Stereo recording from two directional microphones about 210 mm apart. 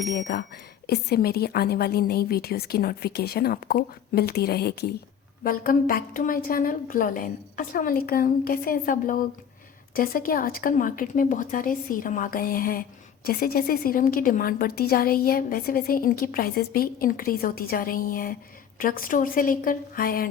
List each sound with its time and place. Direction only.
0.1 s a woman's voice: 50° left (ahead or behind)